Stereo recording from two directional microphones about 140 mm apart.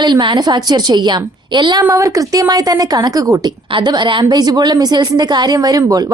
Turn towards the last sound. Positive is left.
turn(degrees=-25)  # may be behind; listen again after turning